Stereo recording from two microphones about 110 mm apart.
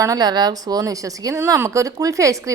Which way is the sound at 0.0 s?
35° right (ahead or behind).